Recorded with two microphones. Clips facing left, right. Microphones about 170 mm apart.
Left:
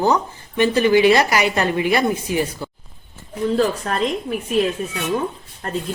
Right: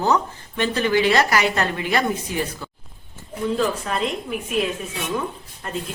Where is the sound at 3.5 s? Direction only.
45° left (ahead or behind).